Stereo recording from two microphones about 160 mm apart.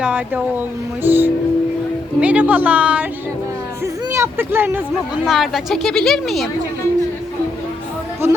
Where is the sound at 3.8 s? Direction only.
20° right (ahead or behind).